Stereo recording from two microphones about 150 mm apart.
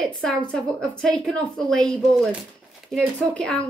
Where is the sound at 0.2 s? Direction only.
5° left (ahead or behind).